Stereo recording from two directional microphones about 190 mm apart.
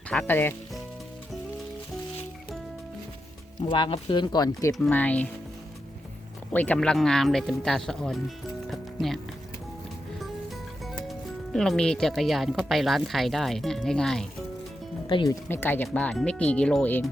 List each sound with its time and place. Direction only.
0.1 s speech: 10° left (ahead or behind)
3.6 s speech: 25° left (ahead or behind)
4.7 s speech: 5° left (ahead or behind)
6.5 s speech: 10° left (ahead or behind)
8.6 s music: centre (ahead or behind)
10.8 s speech: centre (ahead or behind)
15.1 s speech: 20° left (ahead or behind)